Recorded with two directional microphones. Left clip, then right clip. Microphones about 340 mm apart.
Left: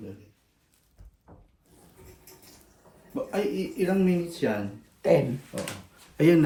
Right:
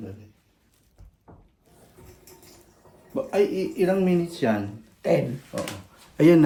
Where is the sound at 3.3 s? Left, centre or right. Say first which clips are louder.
Right 7 dB; right.